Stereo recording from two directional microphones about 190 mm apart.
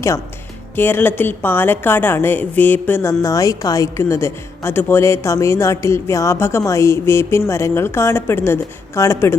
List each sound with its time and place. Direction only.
0.8 s a woman's voice: 10° left (ahead or behind)